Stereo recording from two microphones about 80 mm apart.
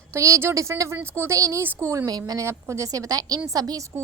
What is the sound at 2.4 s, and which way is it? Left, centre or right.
A woman's voice, right.